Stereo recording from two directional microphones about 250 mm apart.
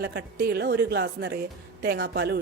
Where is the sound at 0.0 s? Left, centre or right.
Right.